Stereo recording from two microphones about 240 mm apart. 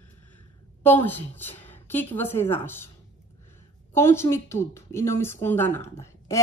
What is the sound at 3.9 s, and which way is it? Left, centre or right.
A woman's voice, centre.